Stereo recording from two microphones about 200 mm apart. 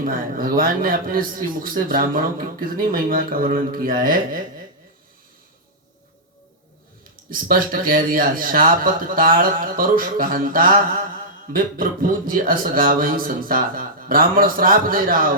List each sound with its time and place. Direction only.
0.0 s speech: 45° right (ahead or behind)
7.3 s speech: 45° right (ahead or behind)